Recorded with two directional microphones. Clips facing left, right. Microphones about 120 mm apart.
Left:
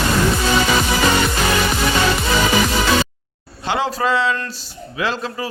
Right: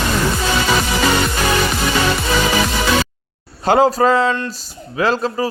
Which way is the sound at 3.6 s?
40° right (ahead or behind).